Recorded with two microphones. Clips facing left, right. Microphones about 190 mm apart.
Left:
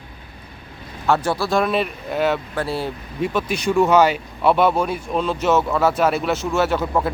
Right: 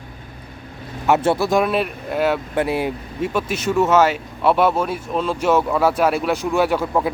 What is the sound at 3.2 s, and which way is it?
Speech, 5° right (ahead or behind).